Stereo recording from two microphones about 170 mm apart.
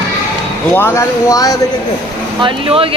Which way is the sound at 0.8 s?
15° left (ahead or behind).